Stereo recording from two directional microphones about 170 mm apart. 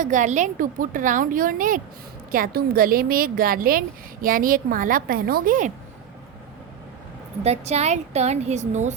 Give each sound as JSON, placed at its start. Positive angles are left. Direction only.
{"t": 0.0, "sound": "a woman's voice", "side_deg": -45}
{"t": 7.4, "sound": "a woman's voice", "side_deg": -40}